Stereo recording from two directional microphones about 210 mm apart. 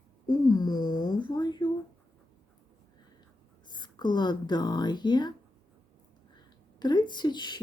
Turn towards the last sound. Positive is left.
turn(degrees=20)  # may be behind; listen again after turning